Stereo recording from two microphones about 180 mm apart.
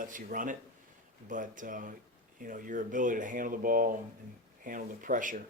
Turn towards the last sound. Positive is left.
turn(degrees=-45)  # may be behind; listen again after turning